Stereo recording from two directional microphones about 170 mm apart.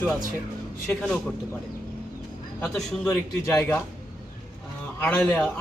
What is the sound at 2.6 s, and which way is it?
Speech, centre (ahead or behind).